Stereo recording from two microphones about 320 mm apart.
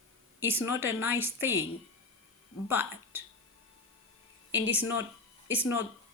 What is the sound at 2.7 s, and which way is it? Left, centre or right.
Speech, centre.